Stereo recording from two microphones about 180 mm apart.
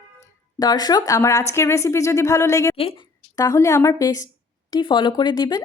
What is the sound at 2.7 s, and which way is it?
Speech, 30° left (ahead or behind).